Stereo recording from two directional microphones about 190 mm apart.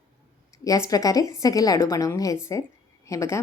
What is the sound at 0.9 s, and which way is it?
Speech, 20° left (ahead or behind).